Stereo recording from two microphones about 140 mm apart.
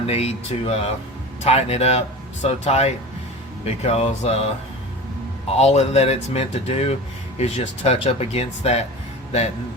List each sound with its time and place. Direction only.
0.0 s speech: 50° left (ahead or behind)
5.5 s speech: 50° left (ahead or behind)